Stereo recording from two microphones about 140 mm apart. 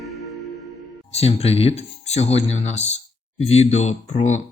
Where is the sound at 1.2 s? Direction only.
45° left (ahead or behind).